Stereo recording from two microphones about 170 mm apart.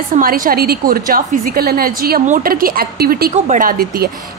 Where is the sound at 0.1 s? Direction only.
55° right (ahead or behind).